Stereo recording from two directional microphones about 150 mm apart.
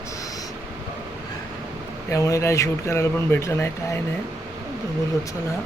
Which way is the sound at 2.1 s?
20° left (ahead or behind).